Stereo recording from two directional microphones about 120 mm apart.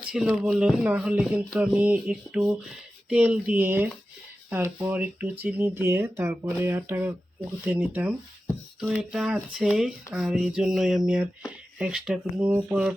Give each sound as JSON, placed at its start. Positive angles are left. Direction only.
{"t": 0.1, "sound": "speech", "side_deg": -5}